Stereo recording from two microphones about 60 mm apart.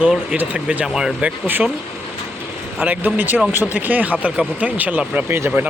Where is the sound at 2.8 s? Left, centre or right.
Right.